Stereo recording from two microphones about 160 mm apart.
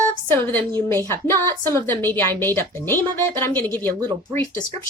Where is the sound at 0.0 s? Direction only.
10° left (ahead or behind).